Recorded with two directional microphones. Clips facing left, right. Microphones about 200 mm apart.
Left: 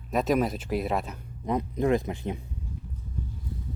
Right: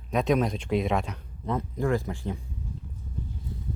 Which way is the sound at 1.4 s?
20° left (ahead or behind).